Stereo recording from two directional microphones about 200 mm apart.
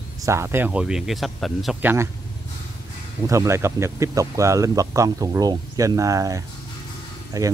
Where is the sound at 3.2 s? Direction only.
15° right (ahead or behind).